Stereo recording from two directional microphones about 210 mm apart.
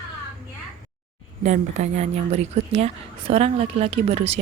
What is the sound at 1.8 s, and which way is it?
A woman's voice, 30° right (ahead or behind).